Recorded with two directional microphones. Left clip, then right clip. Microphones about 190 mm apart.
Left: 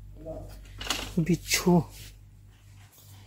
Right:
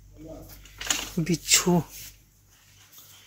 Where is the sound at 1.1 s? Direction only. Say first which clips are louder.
Right 5 dB; 5° left (ahead or behind).